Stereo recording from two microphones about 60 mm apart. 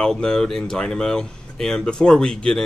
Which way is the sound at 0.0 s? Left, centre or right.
Centre.